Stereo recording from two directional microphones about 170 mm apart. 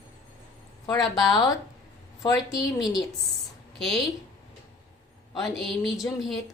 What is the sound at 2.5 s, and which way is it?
Speech, 20° left (ahead or behind).